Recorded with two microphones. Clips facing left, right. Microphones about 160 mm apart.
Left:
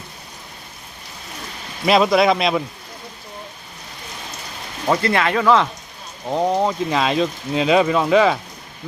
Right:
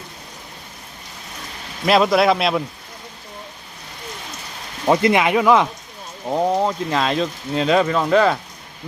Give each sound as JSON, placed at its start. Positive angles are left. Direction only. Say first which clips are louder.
{"t": 1.8, "sound": "speech", "louder": "even", "side_deg": 0}
{"t": 4.9, "sound": "speech", "louder": "right 3 dB", "side_deg": -15}